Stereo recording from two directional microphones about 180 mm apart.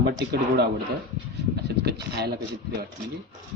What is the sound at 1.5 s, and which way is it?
Speech, 65° right (ahead or behind).